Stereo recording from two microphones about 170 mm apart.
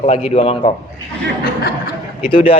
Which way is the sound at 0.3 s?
35° left (ahead or behind).